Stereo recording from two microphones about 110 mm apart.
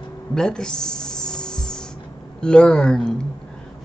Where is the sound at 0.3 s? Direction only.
5° left (ahead or behind).